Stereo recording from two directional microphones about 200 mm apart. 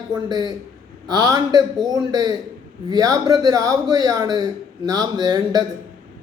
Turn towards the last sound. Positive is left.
turn(degrees=-20)  # may be behind; listen again after turning